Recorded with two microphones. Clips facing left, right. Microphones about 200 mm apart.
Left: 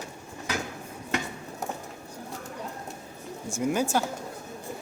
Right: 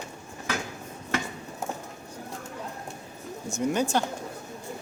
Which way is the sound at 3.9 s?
5° left (ahead or behind).